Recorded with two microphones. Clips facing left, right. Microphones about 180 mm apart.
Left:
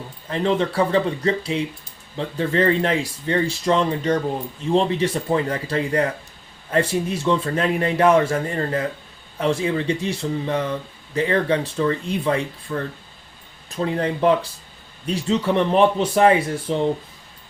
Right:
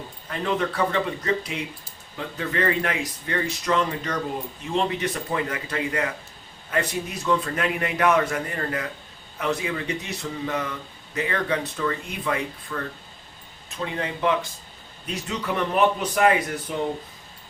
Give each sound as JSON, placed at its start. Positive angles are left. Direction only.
{"t": 0.3, "sound": "a man's voice", "side_deg": 30}